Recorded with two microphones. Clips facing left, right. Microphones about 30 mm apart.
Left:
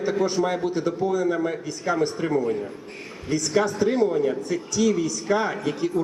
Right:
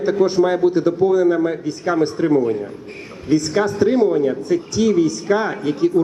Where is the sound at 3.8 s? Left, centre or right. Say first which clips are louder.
Right 5 dB; right.